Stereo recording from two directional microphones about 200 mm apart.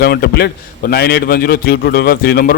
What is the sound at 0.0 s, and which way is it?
A man's voice, 55° left (ahead or behind).